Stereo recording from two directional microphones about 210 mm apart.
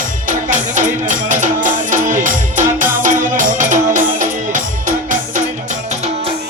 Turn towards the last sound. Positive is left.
turn(degrees=-30)  # may be behind; listen again after turning